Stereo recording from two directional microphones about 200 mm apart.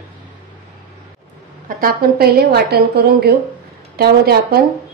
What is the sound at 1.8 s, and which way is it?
Speech, 50° right (ahead or behind).